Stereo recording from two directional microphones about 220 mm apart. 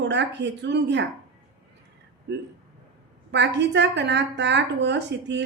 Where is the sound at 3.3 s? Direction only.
50° right (ahead or behind).